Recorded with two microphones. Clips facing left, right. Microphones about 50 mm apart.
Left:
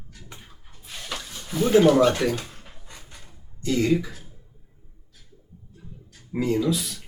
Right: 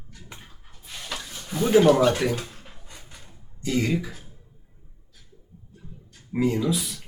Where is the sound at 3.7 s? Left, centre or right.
Centre.